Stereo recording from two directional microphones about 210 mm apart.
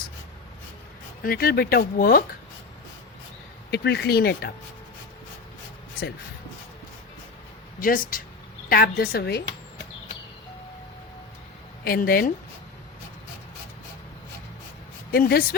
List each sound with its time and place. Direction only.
1.2 s speech: 45° left (ahead or behind)
3.7 s speech: 50° left (ahead or behind)
7.8 s speech: 40° left (ahead or behind)
11.9 s speech: 45° left (ahead or behind)
15.1 s speech: 45° left (ahead or behind)